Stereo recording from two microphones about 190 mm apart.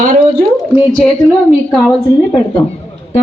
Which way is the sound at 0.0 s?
45° right (ahead or behind).